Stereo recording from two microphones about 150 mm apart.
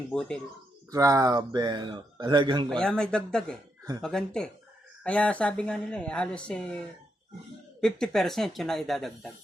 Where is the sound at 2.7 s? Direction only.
5° left (ahead or behind).